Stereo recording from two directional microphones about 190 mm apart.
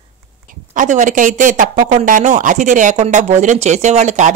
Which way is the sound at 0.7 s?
40° right (ahead or behind).